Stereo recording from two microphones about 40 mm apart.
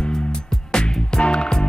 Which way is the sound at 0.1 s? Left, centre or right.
Centre.